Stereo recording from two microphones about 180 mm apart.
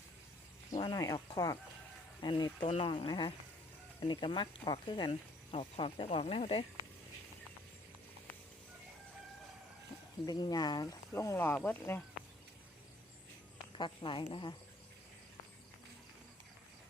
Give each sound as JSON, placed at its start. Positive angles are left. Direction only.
{"t": 0.7, "sound": "speech", "side_deg": 25}
{"t": 10.2, "sound": "speech", "side_deg": 20}
{"t": 13.7, "sound": "speech", "side_deg": 25}